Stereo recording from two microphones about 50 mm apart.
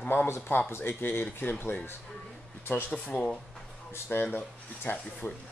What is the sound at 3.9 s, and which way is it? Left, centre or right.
Speech, left.